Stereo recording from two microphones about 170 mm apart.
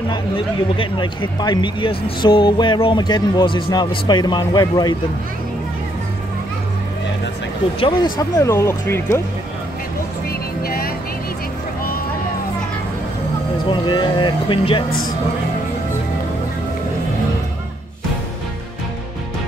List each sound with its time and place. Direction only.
0.7 s speech: 30° left (ahead or behind)
7.8 s speech: 25° left (ahead or behind)
10.6 s music: 65° left (ahead or behind)
13.7 s speech: 30° left (ahead or behind)